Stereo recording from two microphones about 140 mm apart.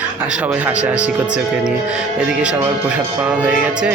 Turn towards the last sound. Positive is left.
turn(degrees=-10)  # may be behind; listen again after turning